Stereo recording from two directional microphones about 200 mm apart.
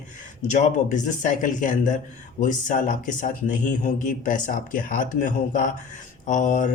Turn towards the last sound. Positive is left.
turn(degrees=40)  # may be behind; listen again after turning